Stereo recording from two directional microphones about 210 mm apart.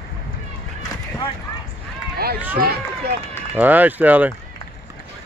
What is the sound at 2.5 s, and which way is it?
Speech, 50° right (ahead or behind).